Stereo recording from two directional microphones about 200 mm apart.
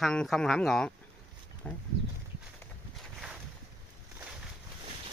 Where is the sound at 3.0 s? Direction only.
Centre (ahead or behind).